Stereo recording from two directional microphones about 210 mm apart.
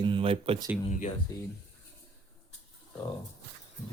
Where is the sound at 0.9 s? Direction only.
35° left (ahead or behind).